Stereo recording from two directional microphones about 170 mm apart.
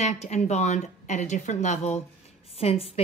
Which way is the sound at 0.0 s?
40° left (ahead or behind).